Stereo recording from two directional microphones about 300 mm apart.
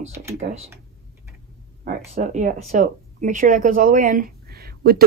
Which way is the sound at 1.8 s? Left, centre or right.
Right.